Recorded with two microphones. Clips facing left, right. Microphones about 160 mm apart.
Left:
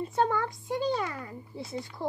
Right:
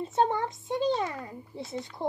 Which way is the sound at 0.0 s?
25° right (ahead or behind).